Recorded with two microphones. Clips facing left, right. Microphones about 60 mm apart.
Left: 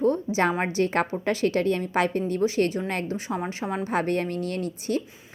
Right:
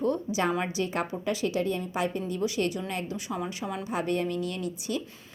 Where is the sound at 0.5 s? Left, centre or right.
Left.